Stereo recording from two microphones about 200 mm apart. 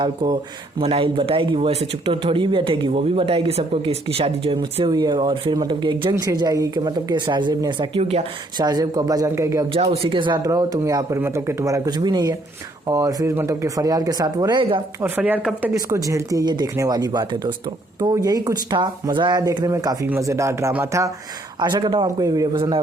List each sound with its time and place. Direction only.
0.0 s speech: 25° right (ahead or behind)
8.6 s speech: 20° right (ahead or behind)
9.7 s speech: 30° right (ahead or behind)
15.0 s speech: 10° right (ahead or behind)